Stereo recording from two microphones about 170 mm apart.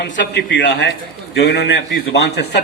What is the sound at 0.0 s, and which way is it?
A man's voice, 85° left.